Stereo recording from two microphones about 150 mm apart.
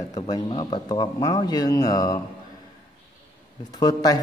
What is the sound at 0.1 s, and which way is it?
A man's voice, 30° left (ahead or behind).